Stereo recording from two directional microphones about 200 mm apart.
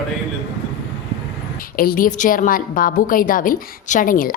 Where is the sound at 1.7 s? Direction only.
45° left (ahead or behind).